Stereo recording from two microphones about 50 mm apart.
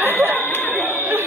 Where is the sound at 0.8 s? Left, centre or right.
Right.